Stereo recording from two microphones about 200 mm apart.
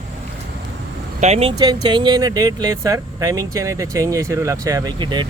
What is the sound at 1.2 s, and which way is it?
Speech, 30° right (ahead or behind).